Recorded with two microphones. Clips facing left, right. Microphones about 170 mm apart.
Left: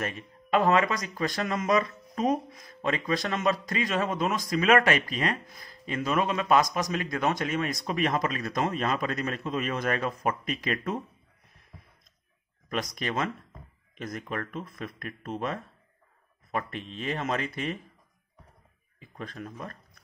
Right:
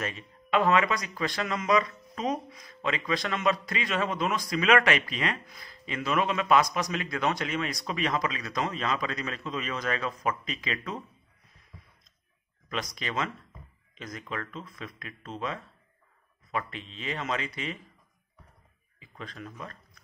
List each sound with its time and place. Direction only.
0.0 s speech: 45° left (ahead or behind)
2.5 s a sound: 50° left (ahead or behind)
3.1 s speech: 45° left (ahead or behind)
12.6 s speech: 50° left (ahead or behind)
16.5 s speech: 50° left (ahead or behind)
18.9 s speech: 50° left (ahead or behind)